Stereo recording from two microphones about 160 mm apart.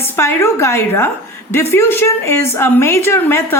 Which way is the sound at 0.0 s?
15° left (ahead or behind).